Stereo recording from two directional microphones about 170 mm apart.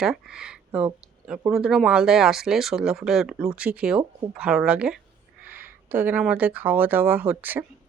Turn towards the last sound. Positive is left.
turn(degrees=-10)  # may be behind; listen again after turning